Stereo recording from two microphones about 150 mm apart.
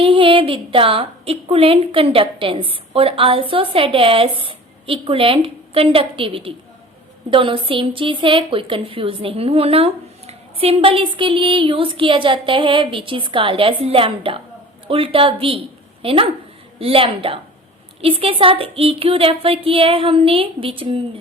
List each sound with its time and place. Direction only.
0.0 s a woman's voice: 35° right (ahead or behind)